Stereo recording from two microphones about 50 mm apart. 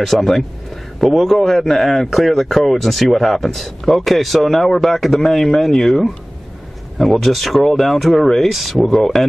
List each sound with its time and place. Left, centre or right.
0.0 s a man's voice: centre